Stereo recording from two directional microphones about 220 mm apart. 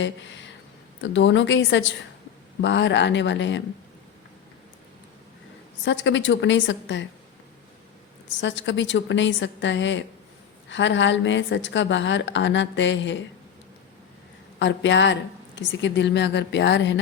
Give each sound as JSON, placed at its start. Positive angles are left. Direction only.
{"t": 0.0, "sound": "a woman's voice", "side_deg": 55}
{"t": 5.8, "sound": "a woman's voice", "side_deg": 55}
{"t": 8.4, "sound": "a woman's voice", "side_deg": 55}
{"t": 14.6, "sound": "a woman's voice", "side_deg": 55}